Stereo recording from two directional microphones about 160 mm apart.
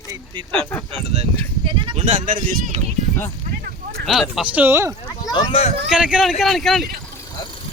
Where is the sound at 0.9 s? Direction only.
40° right (ahead or behind).